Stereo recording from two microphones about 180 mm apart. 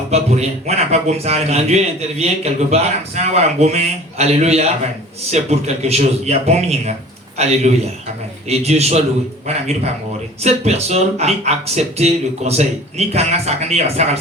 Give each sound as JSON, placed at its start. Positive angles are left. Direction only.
{"t": 0.1, "sound": "a man's voice", "side_deg": -35}
{"t": 10.4, "sound": "a man's voice", "side_deg": -35}